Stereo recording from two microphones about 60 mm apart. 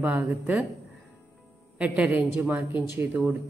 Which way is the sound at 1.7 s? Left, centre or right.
Centre.